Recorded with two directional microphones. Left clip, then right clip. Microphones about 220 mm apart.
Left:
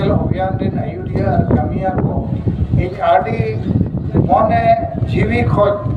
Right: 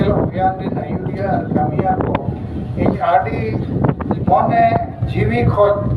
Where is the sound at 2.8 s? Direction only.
20° left (ahead or behind).